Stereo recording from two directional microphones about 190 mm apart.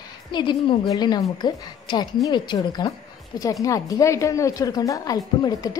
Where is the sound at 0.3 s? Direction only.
25° left (ahead or behind).